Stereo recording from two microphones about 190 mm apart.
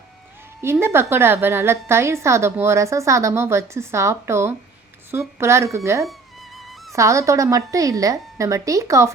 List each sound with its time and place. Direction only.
0.6 s a woman's voice: 15° right (ahead or behind)
6.1 s music: centre (ahead or behind)
6.9 s a woman's voice: 15° right (ahead or behind)